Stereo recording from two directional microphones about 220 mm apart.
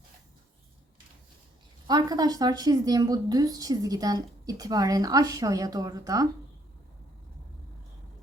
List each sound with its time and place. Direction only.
1.9 s a woman's voice: 20° right (ahead or behind)